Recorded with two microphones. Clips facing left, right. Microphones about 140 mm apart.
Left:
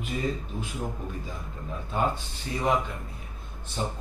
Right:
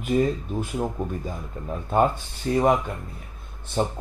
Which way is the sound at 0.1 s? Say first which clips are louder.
Right 9 dB; 45° right (ahead or behind).